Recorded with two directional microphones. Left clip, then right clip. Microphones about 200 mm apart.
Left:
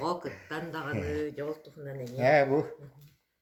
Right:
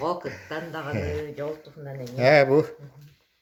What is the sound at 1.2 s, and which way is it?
Speech, 35° left (ahead or behind).